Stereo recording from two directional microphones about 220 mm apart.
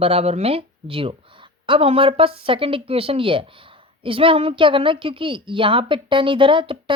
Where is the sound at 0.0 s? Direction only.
25° right (ahead or behind).